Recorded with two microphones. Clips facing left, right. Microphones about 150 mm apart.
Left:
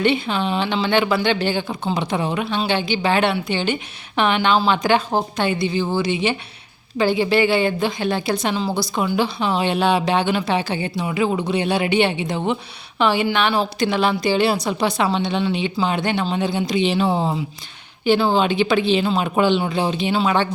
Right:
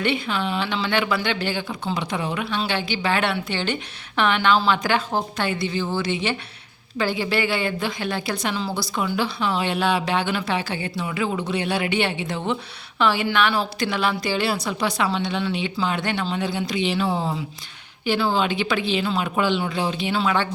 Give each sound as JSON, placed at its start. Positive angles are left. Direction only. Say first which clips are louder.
{"t": 0.0, "sound": "a woman's voice", "louder": "left 4 dB", "side_deg": 25}